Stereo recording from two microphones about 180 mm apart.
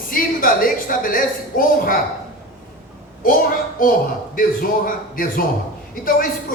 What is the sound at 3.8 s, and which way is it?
A man's voice, 50° left (ahead or behind).